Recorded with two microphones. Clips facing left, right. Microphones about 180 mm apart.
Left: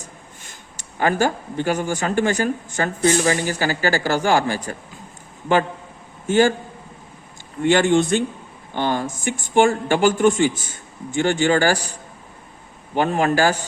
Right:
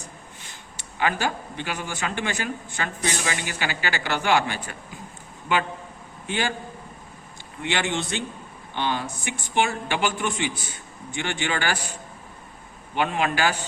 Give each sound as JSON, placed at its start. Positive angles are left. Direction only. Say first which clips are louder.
{"t": 0.8, "sound": "speech", "louder": "left 6 dB", "side_deg": 45}
{"t": 6.2, "sound": "a man's voice", "louder": "left 12 dB", "side_deg": 45}
{"t": 7.6, "sound": "speech", "louder": "left 11 dB", "side_deg": 45}
{"t": 12.9, "sound": "speech", "louder": "left 6 dB", "side_deg": 40}